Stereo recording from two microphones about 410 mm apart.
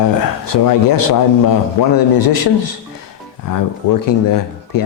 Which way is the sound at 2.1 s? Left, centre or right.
Left.